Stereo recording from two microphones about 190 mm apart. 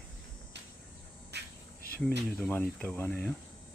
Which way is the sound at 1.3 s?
65° right (ahead or behind).